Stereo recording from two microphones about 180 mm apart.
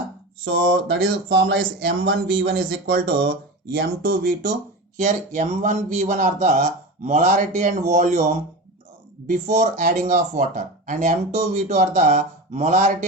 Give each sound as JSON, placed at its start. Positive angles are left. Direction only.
{"t": 0.4, "sound": "speech", "side_deg": -75}
{"t": 2.4, "sound": "speech", "side_deg": -60}